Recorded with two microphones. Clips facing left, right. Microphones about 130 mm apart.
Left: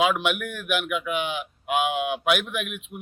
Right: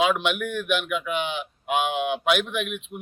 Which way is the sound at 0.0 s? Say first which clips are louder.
Even; 5° left (ahead or behind).